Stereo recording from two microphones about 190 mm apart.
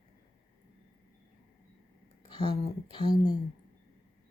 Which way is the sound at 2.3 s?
25° left (ahead or behind).